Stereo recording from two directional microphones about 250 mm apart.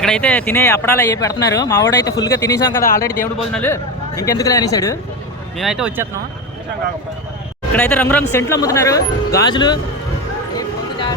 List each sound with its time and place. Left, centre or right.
0.0 s speech: centre
2.8 s speech: left
3.5 s speech: centre
5.5 s speech: centre
7.7 s speech: centre